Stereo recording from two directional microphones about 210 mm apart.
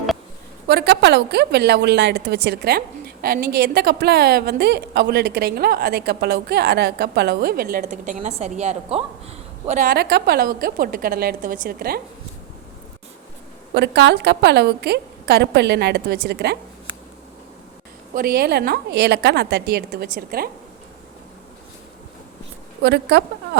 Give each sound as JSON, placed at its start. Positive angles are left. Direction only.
{"t": 0.7, "sound": "a woman's voice", "side_deg": -50}
{"t": 9.6, "sound": "a woman's voice", "side_deg": -40}
{"t": 13.7, "sound": "a woman's voice", "side_deg": -55}
{"t": 18.1, "sound": "a woman's voice", "side_deg": -45}
{"t": 22.8, "sound": "a woman's voice", "side_deg": -50}